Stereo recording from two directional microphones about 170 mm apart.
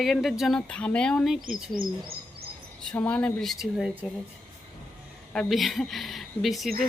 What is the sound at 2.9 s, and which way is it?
Speech, 5° left (ahead or behind).